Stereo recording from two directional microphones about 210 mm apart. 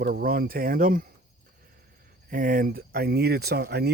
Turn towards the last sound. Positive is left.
turn(degrees=-50)  # may be behind; listen again after turning